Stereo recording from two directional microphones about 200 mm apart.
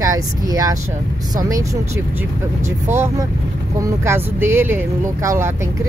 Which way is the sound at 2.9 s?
15° right (ahead or behind).